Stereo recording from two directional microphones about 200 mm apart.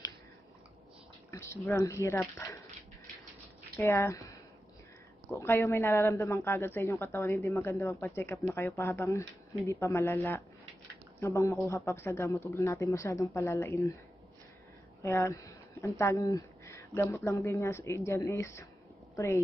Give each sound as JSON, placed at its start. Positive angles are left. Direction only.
{"t": 1.3, "sound": "speech", "side_deg": 15}
{"t": 3.7, "sound": "speech", "side_deg": 10}
{"t": 5.3, "sound": "speech", "side_deg": 15}
{"t": 15.0, "sound": "a sound", "side_deg": 15}
{"t": 16.0, "sound": "a woman's voice", "side_deg": 15}